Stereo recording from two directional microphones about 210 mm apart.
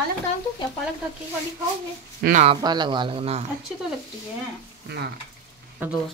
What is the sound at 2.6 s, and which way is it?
Speech, 20° right (ahead or behind).